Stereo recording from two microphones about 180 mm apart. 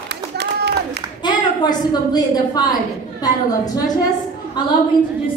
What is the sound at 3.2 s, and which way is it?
Speech, 20° left (ahead or behind).